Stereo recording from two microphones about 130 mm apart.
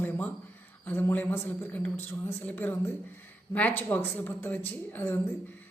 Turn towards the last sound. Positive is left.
turn(degrees=15)  # may be behind; listen again after turning